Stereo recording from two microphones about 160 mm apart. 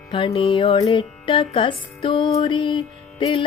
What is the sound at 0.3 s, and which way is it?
Music, 35° left (ahead or behind).